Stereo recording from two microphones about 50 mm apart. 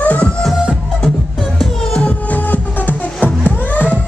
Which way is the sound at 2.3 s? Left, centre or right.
Left.